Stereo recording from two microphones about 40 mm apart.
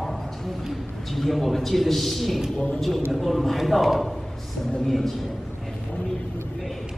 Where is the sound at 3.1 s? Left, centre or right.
Centre.